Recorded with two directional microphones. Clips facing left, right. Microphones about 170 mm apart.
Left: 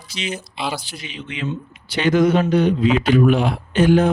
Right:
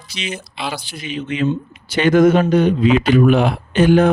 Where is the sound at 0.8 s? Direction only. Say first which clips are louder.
Right 8 dB; 50° right (ahead or behind).